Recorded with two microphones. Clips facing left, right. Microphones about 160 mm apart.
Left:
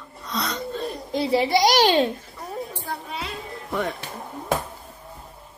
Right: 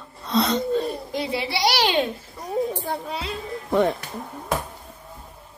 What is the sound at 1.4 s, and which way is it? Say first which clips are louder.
Speech: left 4 dB; 45° left (ahead or behind).